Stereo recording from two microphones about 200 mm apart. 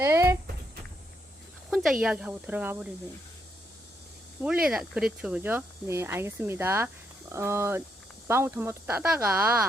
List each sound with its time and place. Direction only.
0.0 s a sound: 15° right (ahead or behind)
1.7 s speech: 5° right (ahead or behind)
4.4 s speech: 5° right (ahead or behind)